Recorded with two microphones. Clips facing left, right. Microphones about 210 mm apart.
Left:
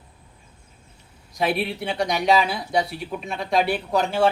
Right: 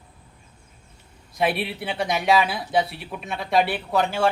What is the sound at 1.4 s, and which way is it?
Speech, centre (ahead or behind).